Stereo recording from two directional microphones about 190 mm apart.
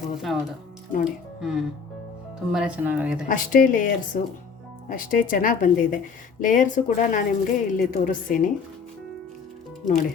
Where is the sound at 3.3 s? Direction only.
45° left (ahead or behind).